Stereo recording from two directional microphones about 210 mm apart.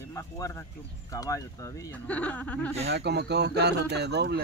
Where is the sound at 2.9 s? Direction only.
50° right (ahead or behind).